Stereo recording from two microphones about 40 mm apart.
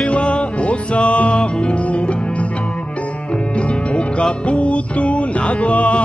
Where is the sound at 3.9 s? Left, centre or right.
Left.